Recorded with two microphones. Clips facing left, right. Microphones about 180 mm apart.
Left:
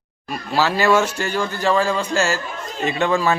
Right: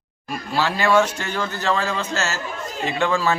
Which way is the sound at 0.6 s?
10° left (ahead or behind).